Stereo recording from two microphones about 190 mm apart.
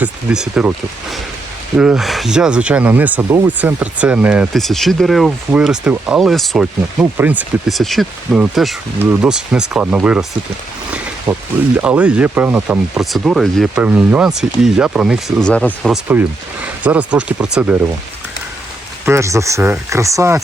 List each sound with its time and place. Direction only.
0.0 s speech: 5° right (ahead or behind)
1.7 s speech: 5° right (ahead or behind)
10.9 s a sound: 5° right (ahead or behind)
11.8 s speech: 5° right (ahead or behind)
19.0 s speech: 15° right (ahead or behind)